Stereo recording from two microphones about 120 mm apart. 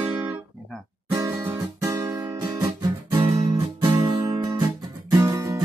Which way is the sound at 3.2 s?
45° right (ahead or behind).